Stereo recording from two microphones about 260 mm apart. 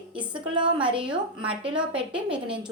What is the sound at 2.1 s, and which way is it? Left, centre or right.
Speech, centre.